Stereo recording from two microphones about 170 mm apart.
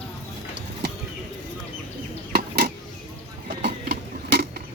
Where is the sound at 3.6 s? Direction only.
75° right (ahead or behind).